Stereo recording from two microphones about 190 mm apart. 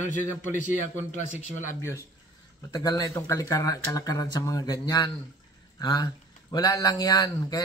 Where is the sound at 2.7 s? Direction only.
20° left (ahead or behind).